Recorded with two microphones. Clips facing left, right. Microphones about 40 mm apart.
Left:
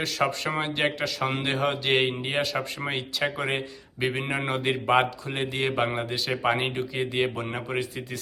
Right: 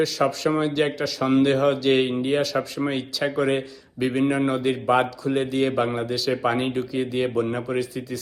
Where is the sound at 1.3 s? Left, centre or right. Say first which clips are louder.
Right 8 dB; left.